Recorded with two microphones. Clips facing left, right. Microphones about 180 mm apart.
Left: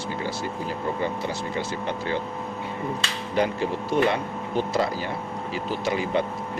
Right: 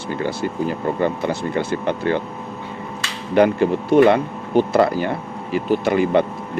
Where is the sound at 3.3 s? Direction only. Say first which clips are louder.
Right 9 dB; 60° right (ahead or behind).